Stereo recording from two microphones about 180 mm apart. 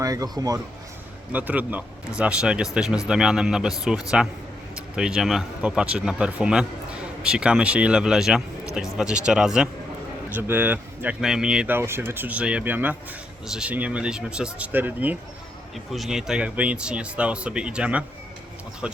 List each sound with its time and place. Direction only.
0.0 s a man's voice: 20° right (ahead or behind)
1.3 s speech: 10° right (ahead or behind)